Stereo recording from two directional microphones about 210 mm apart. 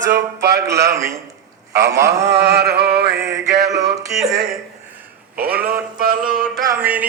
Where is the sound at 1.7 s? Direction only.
50° right (ahead or behind).